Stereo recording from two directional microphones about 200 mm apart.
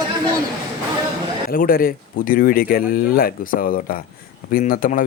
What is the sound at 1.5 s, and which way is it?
Speech, 45° left (ahead or behind).